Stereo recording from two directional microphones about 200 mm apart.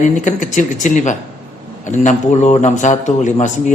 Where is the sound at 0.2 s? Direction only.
40° left (ahead or behind).